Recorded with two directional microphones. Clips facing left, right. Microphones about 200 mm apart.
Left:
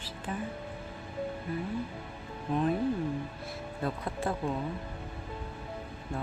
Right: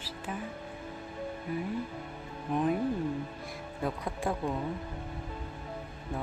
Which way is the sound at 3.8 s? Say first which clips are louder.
Even; 15° right (ahead or behind).